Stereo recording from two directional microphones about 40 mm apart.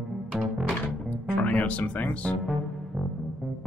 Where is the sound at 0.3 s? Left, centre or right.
Right.